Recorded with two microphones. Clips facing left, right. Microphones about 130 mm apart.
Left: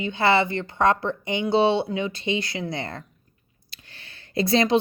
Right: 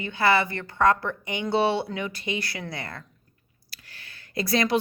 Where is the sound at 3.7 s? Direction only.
25° left (ahead or behind).